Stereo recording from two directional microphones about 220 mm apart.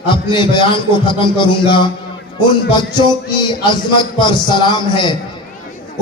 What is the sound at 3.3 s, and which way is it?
A man's voice, 20° left (ahead or behind).